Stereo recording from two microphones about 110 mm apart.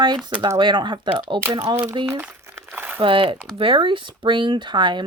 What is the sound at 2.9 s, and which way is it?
Speech, 55° right (ahead or behind).